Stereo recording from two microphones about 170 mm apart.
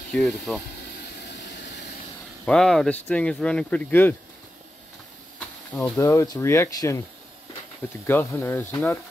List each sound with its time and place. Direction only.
0.1 s speech: centre (ahead or behind)
1.3 s vehicle: 85° left
2.4 s speech: 5° left (ahead or behind)
5.8 s speech: 15° left (ahead or behind)
8.1 s speech: 15° left (ahead or behind)